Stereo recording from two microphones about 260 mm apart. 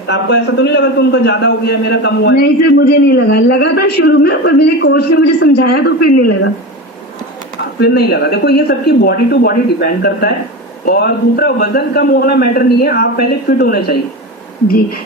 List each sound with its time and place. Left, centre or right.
0.1 s a man's voice: left
7.8 s a man's voice: left